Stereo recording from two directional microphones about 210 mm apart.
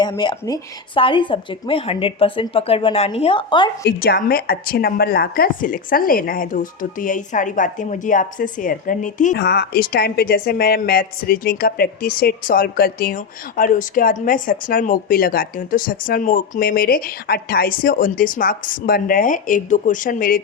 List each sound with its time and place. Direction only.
0.0 s speech: 20° left (ahead or behind)
3.8 s a woman's voice: 45° left (ahead or behind)
9.3 s a woman's voice: 50° left (ahead or behind)